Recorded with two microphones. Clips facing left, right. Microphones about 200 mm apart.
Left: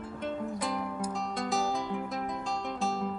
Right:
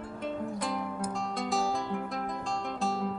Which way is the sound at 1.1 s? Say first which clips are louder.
Right 1 dB; centre (ahead or behind).